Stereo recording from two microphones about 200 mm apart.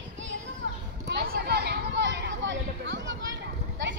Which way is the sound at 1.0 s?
50° right (ahead or behind).